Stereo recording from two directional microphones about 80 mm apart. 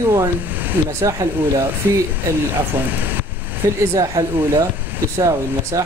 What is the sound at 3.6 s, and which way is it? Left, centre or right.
Speech, right.